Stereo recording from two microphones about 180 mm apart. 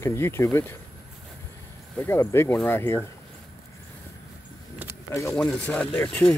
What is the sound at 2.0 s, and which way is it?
Speech, 15° left (ahead or behind).